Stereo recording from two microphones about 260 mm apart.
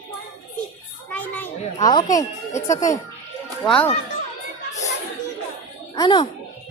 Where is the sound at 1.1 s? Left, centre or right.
Centre.